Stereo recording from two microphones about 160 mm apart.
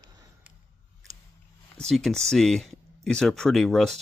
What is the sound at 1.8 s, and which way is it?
Speech, centre (ahead or behind).